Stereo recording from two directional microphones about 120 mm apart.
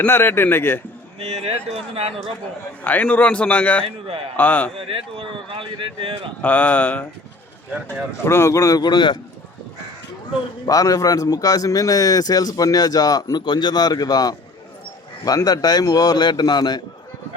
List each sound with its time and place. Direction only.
0.0 s speech: 20° left (ahead or behind)
1.2 s speech: 65° right (ahead or behind)
2.8 s a man's voice: 15° left (ahead or behind)
3.8 s a man's voice: 50° right (ahead or behind)
4.4 s a man's voice: 15° left (ahead or behind)
4.9 s a man's voice: 50° right (ahead or behind)
6.4 s a man's voice: 15° left (ahead or behind)
8.2 s speech: 20° left (ahead or behind); by 9.1 s 40° left (ahead or behind)
10.7 s a man's voice: 30° left (ahead or behind)